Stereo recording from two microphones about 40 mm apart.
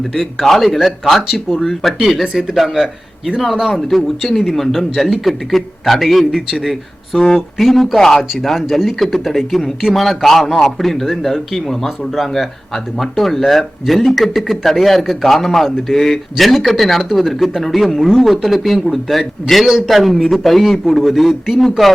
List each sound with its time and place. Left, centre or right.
0.1 s speech: centre
2.8 s a man's voice: centre
3.4 s speech: centre